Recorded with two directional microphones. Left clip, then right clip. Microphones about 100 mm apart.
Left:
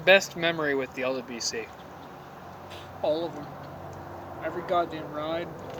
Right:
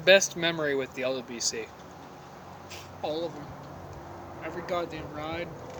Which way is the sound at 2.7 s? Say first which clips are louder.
Left 6 dB; 15° right (ahead or behind).